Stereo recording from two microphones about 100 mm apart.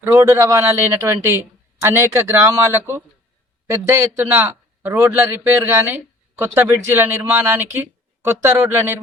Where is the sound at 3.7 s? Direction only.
25° right (ahead or behind).